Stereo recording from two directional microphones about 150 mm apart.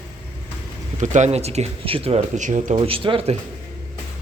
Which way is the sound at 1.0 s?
55° right (ahead or behind).